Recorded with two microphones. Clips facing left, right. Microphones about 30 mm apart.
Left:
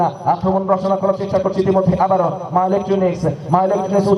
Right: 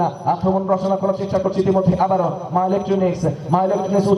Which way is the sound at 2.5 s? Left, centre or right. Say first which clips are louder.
Left 3 dB; left.